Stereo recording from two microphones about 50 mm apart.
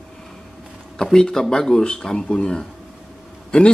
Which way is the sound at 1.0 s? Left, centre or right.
Centre.